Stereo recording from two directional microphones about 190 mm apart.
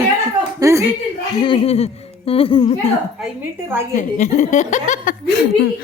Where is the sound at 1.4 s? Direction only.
30° left (ahead or behind).